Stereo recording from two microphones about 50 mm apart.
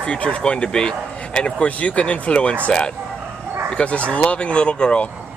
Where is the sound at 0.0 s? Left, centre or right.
Left.